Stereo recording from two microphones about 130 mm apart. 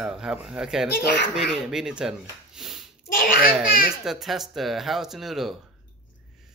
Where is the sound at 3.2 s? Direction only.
90° left.